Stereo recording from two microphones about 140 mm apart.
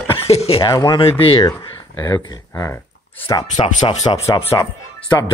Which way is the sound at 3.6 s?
35° left (ahead or behind).